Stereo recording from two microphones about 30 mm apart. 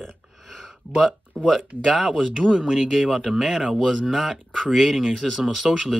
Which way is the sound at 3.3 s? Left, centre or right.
Right.